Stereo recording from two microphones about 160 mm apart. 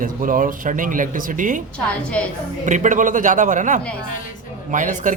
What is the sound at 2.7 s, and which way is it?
Speech, 50° right (ahead or behind).